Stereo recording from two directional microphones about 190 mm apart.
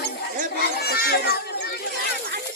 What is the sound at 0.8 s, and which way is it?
Children playing, 55° left (ahead or behind).